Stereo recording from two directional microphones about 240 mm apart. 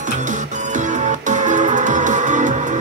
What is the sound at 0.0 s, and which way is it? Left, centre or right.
Music, right.